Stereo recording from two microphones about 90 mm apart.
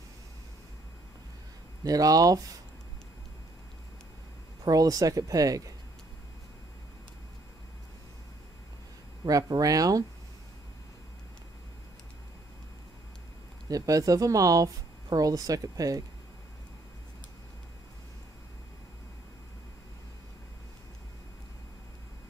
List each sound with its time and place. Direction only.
1.9 s speech: 40° right (ahead or behind)
4.6 s speech: 40° right (ahead or behind)
9.2 s speech: 45° right (ahead or behind)
13.7 s speech: 40° right (ahead or behind)